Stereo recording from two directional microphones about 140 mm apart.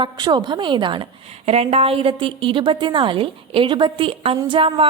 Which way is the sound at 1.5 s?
45° right (ahead or behind).